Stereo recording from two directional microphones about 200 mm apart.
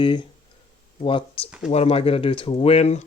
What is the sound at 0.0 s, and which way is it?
Speech, 25° left (ahead or behind).